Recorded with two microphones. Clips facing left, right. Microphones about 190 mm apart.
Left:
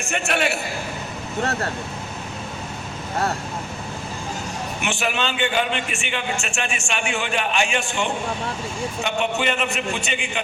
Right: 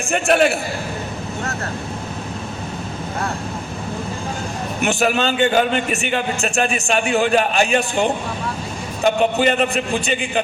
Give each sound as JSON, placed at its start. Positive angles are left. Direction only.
{"t": 0.1, "sound": "a man's voice", "side_deg": -35}
{"t": 4.8, "sound": "a man's voice", "side_deg": -40}